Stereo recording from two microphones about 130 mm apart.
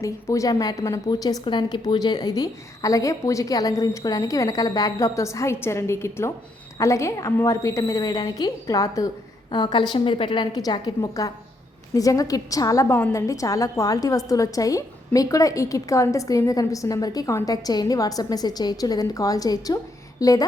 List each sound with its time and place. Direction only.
0.0 s a woman's voice: 25° left (ahead or behind)